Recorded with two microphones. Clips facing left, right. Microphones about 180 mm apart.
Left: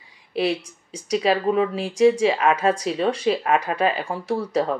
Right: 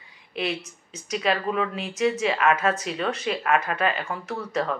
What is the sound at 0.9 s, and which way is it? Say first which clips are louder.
Speech: left 5 dB; 35° left (ahead or behind).